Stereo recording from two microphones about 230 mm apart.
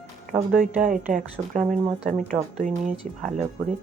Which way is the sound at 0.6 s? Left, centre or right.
Right.